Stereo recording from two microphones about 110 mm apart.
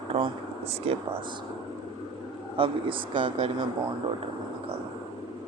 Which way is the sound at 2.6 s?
50° right (ahead or behind).